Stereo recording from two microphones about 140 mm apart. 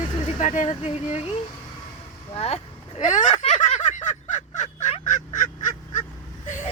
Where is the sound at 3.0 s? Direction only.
65° left (ahead or behind).